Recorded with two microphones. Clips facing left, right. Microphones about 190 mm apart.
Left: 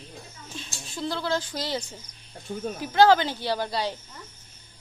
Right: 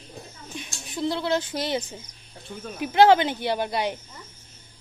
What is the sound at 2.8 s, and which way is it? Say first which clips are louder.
Speech: right 2 dB; 20° right (ahead or behind).